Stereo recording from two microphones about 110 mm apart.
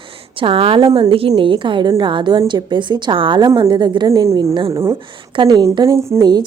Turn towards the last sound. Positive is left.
turn(degrees=-35)  # may be behind; listen again after turning